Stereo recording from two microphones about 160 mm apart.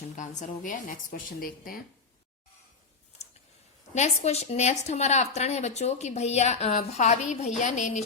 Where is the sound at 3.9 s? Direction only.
45° left (ahead or behind).